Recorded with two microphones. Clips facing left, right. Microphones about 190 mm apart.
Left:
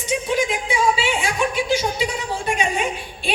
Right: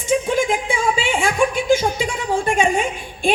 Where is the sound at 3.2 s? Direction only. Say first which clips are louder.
Right 6 dB; 50° right (ahead or behind).